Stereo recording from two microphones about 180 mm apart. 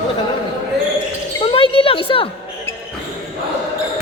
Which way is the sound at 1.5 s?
30° left (ahead or behind).